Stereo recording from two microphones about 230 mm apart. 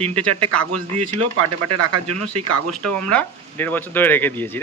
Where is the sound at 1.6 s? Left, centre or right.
Right.